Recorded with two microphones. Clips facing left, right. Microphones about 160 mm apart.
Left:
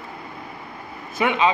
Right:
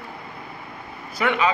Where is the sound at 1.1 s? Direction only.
20° left (ahead or behind).